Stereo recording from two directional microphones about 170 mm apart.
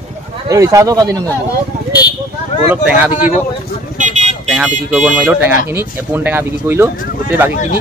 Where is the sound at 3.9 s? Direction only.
45° right (ahead or behind).